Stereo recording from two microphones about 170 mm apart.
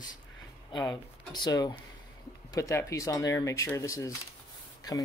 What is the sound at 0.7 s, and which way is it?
Speech, 25° left (ahead or behind).